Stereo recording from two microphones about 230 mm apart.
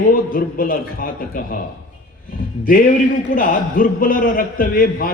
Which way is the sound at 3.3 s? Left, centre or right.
Left.